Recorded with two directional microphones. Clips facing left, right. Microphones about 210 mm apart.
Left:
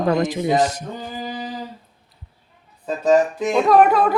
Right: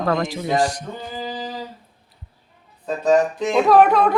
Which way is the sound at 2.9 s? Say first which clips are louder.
Left 1 dB; 10° left (ahead or behind).